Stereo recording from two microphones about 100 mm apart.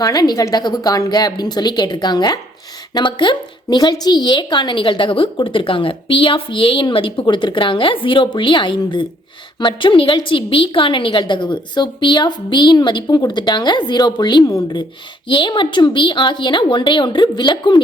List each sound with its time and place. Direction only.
0.0 s a woman's voice: 40° left (ahead or behind)